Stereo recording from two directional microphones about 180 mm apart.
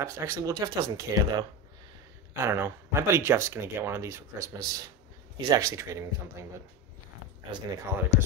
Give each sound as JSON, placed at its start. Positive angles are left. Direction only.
{"t": 0.0, "sound": "speech", "side_deg": -15}
{"t": 7.5, "sound": "speech", "side_deg": -20}